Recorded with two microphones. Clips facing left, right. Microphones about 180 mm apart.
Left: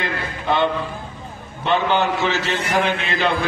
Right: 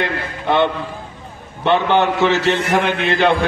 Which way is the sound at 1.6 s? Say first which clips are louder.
Right 4 dB; 65° right (ahead or behind).